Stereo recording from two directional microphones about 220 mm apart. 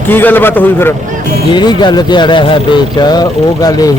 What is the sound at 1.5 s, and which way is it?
A man's voice, 20° left (ahead or behind).